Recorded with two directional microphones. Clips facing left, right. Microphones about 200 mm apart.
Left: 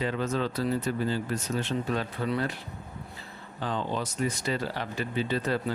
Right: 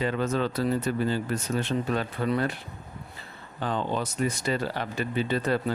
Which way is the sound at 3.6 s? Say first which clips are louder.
Right 2 dB; 55° right (ahead or behind).